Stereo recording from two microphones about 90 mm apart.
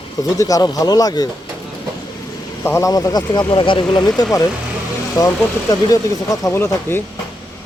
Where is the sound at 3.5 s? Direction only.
65° left (ahead or behind).